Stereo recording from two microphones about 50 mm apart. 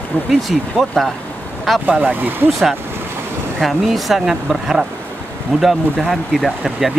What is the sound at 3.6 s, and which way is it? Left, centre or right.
Speech, centre.